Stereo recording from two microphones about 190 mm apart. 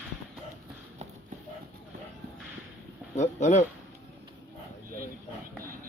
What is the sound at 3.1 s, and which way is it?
Speech, 40° left (ahead or behind).